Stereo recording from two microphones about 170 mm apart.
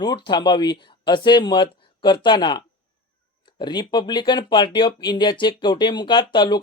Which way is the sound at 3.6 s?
25° left (ahead or behind).